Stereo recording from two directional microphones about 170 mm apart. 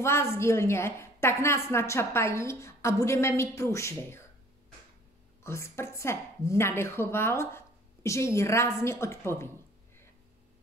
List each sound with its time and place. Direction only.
0.0 s a woman's voice: 15° left (ahead or behind)
5.4 s a woman's voice: 15° left (ahead or behind)